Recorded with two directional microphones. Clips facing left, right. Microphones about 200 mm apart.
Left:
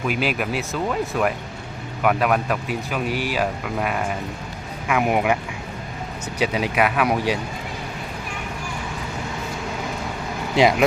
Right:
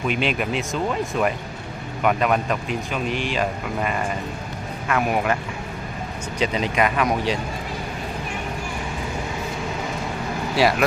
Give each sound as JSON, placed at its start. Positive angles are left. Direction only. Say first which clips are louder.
{"t": 0.1, "sound": "speech", "louder": "even", "side_deg": 5}
{"t": 2.0, "sound": "speech", "louder": "left 1 dB", "side_deg": 5}
{"t": 6.4, "sound": "speech", "louder": "left 1 dB", "side_deg": 10}
{"t": 10.5, "sound": "speech", "louder": "left 3 dB", "side_deg": 20}